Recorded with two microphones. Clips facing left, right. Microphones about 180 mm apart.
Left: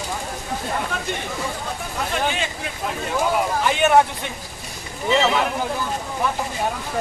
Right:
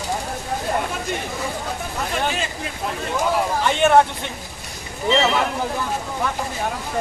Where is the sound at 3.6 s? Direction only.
5° left (ahead or behind).